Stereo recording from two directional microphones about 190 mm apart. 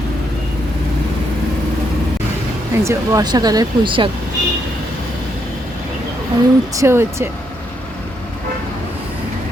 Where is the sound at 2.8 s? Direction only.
20° right (ahead or behind).